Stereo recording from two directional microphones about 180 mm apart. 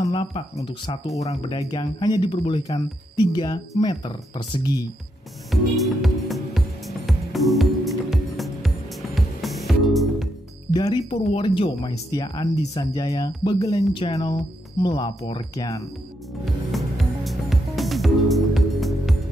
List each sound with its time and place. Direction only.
0.0 s a sound: 30° left (ahead or behind)
0.7 s speech: 25° left (ahead or behind)
3.8 s speech: 25° left (ahead or behind)
5.5 s music: centre (ahead or behind)
10.7 s speech: 25° left (ahead or behind)
16.7 s music: centre (ahead or behind)